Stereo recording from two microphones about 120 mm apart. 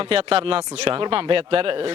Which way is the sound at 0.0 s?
55° right (ahead or behind).